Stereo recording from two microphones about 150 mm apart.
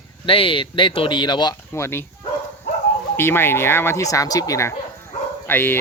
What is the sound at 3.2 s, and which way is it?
Speech, 15° left (ahead or behind).